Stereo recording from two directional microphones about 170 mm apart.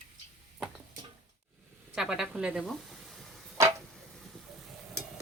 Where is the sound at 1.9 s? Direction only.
5° right (ahead or behind).